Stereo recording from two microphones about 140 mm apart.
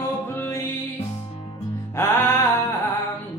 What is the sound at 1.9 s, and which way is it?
Music, 15° left (ahead or behind).